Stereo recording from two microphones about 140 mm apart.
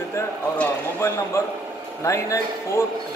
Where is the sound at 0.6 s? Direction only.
20° left (ahead or behind).